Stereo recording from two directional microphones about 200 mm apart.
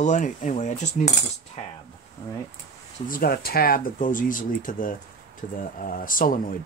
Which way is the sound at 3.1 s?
50° left (ahead or behind).